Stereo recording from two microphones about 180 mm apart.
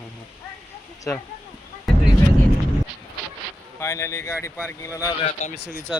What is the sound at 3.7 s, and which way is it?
Speech, 15° left (ahead or behind).